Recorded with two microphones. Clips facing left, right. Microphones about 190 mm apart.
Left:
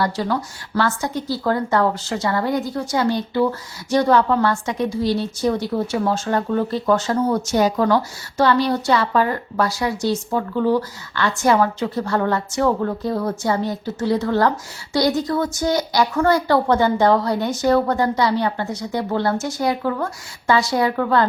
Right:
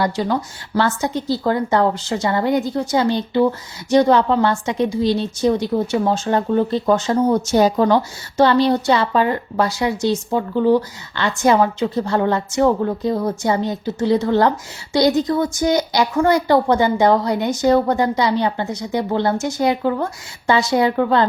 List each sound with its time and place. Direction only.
0.0 s a woman's voice: 20° right (ahead or behind)